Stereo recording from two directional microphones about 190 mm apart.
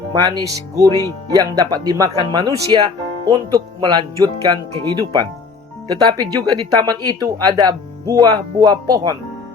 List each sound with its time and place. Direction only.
0.1 s speech: 20° right (ahead or behind)